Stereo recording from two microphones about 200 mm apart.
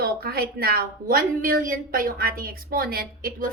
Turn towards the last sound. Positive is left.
turn(degrees=-45)  # may be behind; listen again after turning